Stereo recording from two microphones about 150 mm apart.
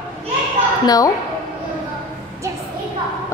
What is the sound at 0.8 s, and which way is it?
Speech, 25° left (ahead or behind).